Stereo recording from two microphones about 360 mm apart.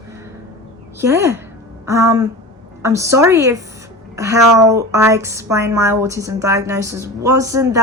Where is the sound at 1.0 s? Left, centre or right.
Centre.